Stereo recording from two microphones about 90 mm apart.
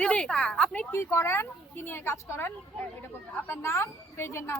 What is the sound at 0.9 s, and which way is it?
A woman's voice, 30° left (ahead or behind).